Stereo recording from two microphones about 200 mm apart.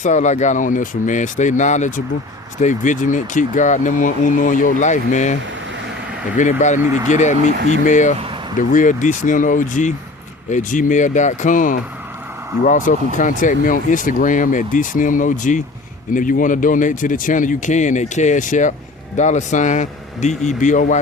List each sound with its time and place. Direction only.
0.0 s speech: 35° left (ahead or behind)
6.8 s speech: 15° right (ahead or behind)
7.1 s speech: 35° left (ahead or behind)